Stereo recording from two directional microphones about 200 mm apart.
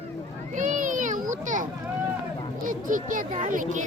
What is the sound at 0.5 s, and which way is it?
Children playing, 40° right (ahead or behind).